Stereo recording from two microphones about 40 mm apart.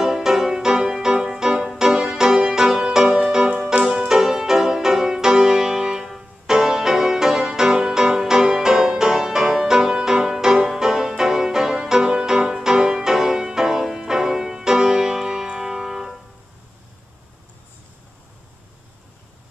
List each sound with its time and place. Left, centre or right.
0.0 s music: centre